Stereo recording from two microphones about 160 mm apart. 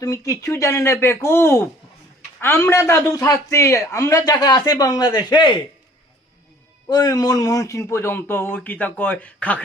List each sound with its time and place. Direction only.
0.0 s a man's voice: 20° left (ahead or behind)
6.8 s speech: 20° left (ahead or behind)